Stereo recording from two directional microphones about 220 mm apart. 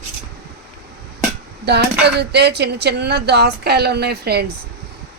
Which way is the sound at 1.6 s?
50° right (ahead or behind).